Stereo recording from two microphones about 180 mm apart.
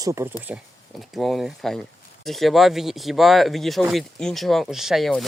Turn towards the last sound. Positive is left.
turn(degrees=0)  # may be behind; listen again after turning